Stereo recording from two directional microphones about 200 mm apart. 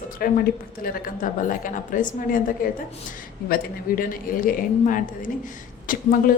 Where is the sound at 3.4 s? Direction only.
45° left (ahead or behind).